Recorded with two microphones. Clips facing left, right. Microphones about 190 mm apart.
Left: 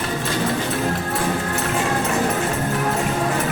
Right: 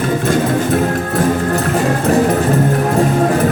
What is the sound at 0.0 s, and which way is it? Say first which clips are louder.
Music: right 8 dB; 50° right (ahead or behind).